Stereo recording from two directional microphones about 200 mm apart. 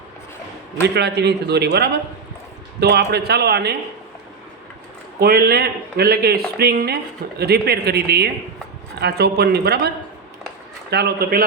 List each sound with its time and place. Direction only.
0.8 s a man's voice: 55° right (ahead or behind)
5.2 s speech: 50° right (ahead or behind)
10.9 s speech: 50° right (ahead or behind)